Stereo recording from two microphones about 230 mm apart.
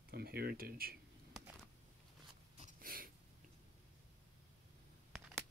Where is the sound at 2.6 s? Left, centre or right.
Right.